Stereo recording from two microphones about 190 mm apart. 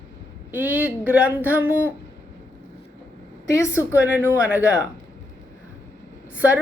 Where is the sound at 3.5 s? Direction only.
15° left (ahead or behind).